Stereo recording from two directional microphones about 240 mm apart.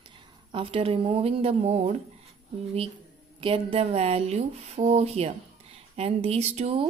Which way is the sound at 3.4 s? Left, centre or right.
Right.